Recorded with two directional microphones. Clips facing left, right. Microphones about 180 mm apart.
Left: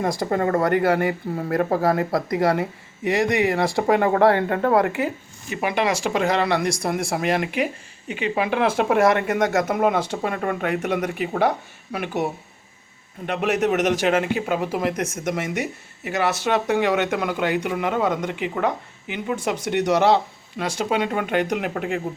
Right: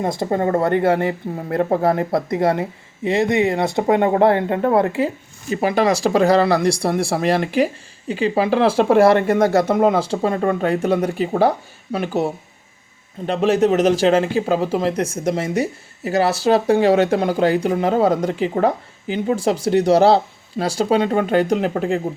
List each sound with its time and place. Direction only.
0.0 s speech: 25° right (ahead or behind)